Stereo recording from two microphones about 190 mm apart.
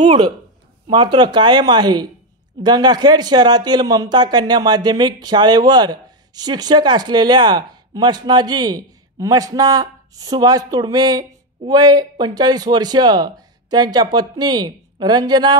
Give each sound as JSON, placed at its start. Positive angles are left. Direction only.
{"t": 0.8, "sound": "speech", "side_deg": -25}